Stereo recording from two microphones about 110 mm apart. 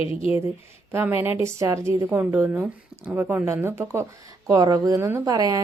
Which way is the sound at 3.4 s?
25° right (ahead or behind).